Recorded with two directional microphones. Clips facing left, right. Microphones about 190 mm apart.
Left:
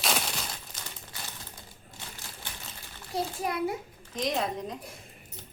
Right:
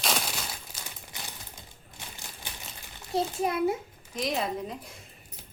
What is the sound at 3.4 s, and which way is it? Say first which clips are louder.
Speech: right 4 dB; 25° right (ahead or behind).